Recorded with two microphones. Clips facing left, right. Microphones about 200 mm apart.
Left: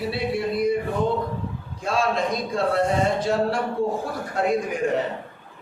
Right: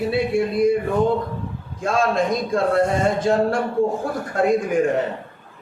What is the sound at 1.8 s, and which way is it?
A man's voice, 50° right (ahead or behind).